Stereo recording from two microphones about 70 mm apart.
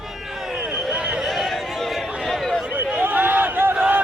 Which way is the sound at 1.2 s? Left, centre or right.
Centre.